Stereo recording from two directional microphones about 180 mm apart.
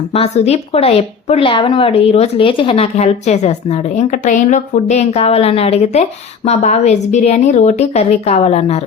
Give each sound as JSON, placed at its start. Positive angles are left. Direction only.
{"t": 0.1, "sound": "a woman's voice", "side_deg": 35}